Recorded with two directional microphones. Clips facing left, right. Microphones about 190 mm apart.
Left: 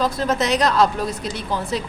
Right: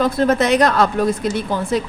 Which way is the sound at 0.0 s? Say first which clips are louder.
Right 5 dB; 55° right (ahead or behind).